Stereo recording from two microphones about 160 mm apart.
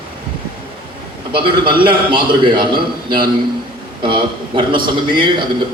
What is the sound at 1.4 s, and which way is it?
A man's voice, 30° right (ahead or behind).